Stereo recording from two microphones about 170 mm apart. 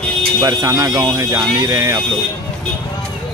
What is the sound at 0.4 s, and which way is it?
Speech, 20° right (ahead or behind).